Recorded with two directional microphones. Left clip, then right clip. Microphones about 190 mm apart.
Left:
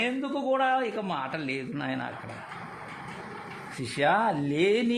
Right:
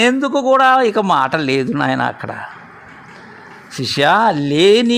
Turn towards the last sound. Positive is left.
turn(degrees=-40)  # may be behind; listen again after turning